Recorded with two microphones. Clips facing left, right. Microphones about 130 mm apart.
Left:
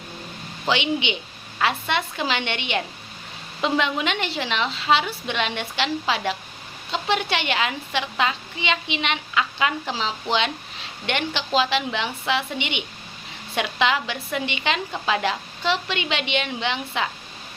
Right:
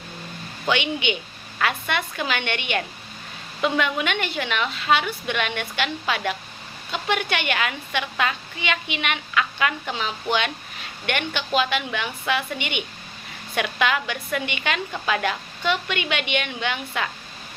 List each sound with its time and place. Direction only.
0.6 s a woman's voice: 20° left (ahead or behind)